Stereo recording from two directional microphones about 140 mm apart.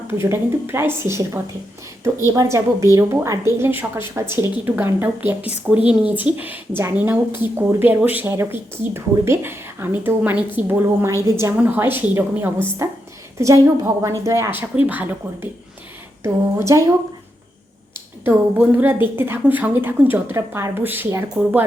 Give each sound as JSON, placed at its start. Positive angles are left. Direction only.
{"t": 0.2, "sound": "a woman's voice", "side_deg": -15}
{"t": 17.9, "sound": "a woman's voice", "side_deg": -15}